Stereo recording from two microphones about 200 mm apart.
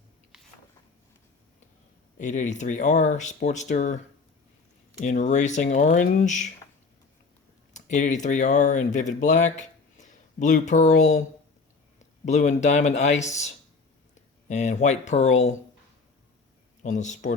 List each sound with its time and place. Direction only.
2.1 s speech: 40° left (ahead or behind)
7.7 s speech: 35° left (ahead or behind)
12.2 s speech: 35° left (ahead or behind)
16.8 s speech: 35° left (ahead or behind)